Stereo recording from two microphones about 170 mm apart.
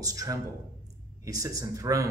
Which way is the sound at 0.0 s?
20° right (ahead or behind).